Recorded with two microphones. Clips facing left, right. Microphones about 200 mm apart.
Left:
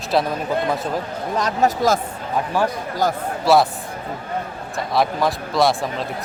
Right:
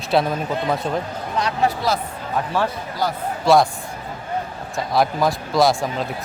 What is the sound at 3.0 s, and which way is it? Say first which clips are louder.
Speech: left 3 dB; 45° left (ahead or behind).